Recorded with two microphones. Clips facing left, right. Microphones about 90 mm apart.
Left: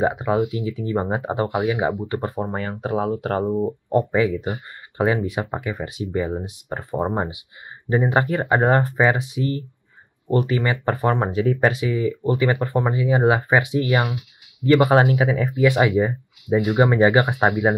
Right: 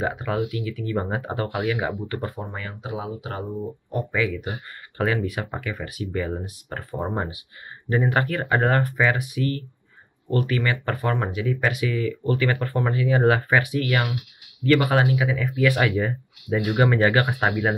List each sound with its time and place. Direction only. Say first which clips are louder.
0.0 s speech: left 5 dB; 25° left (ahead or behind); by 3.5 s 45° left (ahead or behind)
3.9 s speech: left 6 dB; 30° left (ahead or behind)
15.0 s speech: left 4 dB; 35° left (ahead or behind)
15.6 s speech: left 4 dB; 20° left (ahead or behind)